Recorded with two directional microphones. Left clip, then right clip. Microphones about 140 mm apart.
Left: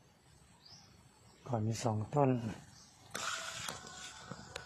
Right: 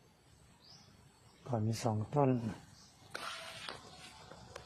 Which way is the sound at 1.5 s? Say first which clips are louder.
Even; 20° right (ahead or behind).